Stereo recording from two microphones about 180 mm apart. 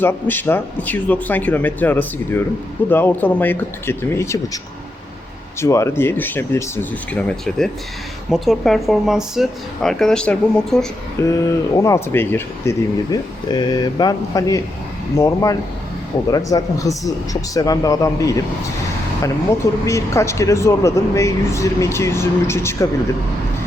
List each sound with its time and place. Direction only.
0.0 s speech: 10° left (ahead or behind)
11.2 s speech: 15° left (ahead or behind)